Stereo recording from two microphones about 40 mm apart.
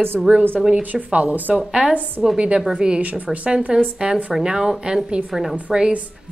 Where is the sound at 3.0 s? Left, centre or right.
Right.